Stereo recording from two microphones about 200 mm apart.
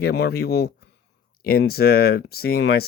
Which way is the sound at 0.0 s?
55° left (ahead or behind).